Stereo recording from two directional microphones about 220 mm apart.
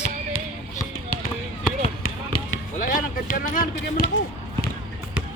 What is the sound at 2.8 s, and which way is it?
Speech, 40° left (ahead or behind).